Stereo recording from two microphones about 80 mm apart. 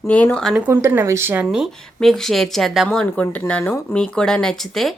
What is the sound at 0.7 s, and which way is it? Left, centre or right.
Speech, right.